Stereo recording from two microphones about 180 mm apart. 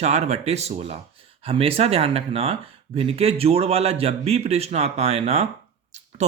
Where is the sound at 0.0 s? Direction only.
40° right (ahead or behind).